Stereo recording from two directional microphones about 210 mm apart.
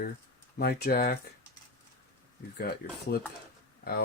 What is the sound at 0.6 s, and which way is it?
Speech, 50° left (ahead or behind).